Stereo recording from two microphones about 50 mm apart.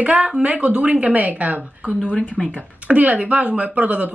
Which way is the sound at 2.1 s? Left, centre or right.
Left.